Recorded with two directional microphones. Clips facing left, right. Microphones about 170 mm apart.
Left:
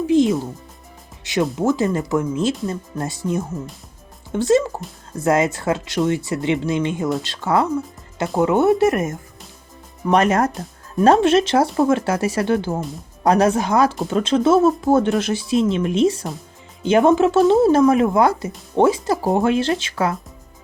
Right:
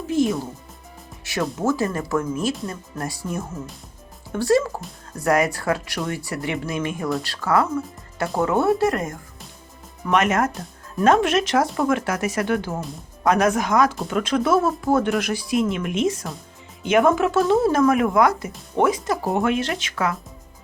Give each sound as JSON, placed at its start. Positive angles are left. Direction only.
{"t": 0.1, "sound": "music", "side_deg": 20}
{"t": 1.2, "sound": "speech", "side_deg": 20}
{"t": 10.1, "sound": "speech", "side_deg": 35}